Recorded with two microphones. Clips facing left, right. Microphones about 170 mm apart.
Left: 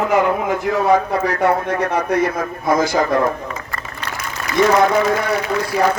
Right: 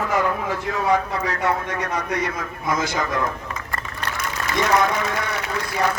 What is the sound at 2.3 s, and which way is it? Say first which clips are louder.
Speech: left 7 dB; 45° left (ahead or behind).